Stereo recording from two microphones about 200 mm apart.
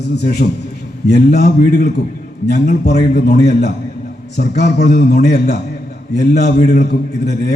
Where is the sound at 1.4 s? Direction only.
35° left (ahead or behind).